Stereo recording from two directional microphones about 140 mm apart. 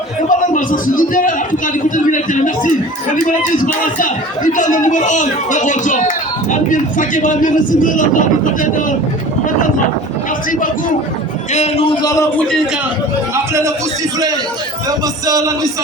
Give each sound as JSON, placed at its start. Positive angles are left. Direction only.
{"t": 0.3, "sound": "a man's voice", "side_deg": 70}
{"t": 11.5, "sound": "a man's voice", "side_deg": 50}
{"t": 12.0, "sound": "a man's voice", "side_deg": 25}
{"t": 12.4, "sound": "a man's voice", "side_deg": 5}
{"t": 13.3, "sound": "a man's voice", "side_deg": -20}
{"t": 14.8, "sound": "a man's voice", "side_deg": -25}